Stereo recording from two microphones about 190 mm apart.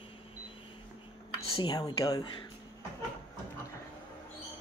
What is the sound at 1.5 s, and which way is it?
Speech, 20° left (ahead or behind).